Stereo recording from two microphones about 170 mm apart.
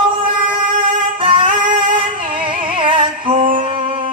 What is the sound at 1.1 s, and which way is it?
Music, 30° right (ahead or behind).